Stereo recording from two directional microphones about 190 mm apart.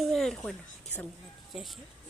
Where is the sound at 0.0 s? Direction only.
Centre (ahead or behind).